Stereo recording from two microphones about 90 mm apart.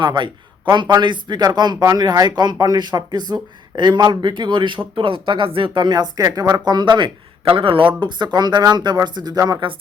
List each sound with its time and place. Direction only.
0.0 s a man's voice: 60° right (ahead or behind)
4.9 s speech: 75° right (ahead or behind)
8.0 s speech: 55° right (ahead or behind)